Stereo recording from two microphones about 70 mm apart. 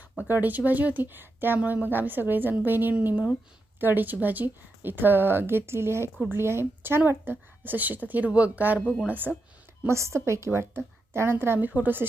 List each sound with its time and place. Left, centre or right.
0.2 s a woman's voice: right
9.8 s a woman's voice: right